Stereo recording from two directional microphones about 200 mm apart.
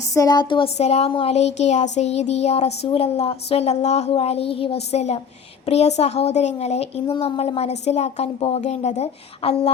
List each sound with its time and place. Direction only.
0.1 s speech: 20° left (ahead or behind)